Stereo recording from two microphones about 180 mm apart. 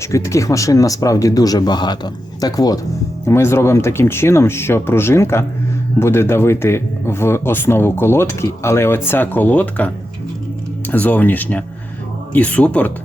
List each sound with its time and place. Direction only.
0.1 s speech: 15° left (ahead or behind)